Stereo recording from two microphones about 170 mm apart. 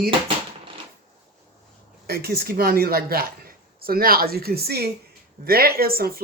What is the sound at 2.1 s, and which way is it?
Speech, 65° right (ahead or behind).